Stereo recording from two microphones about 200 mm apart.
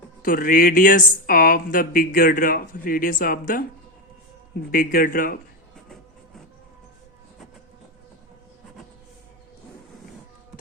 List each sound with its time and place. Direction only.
0.2 s speech: 45° left (ahead or behind)
4.7 s speech: 45° left (ahead or behind)